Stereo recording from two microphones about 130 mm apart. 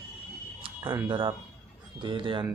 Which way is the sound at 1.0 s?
40° right (ahead or behind).